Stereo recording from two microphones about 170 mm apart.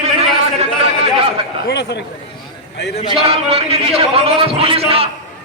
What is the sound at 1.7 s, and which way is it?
Speech, 90° left.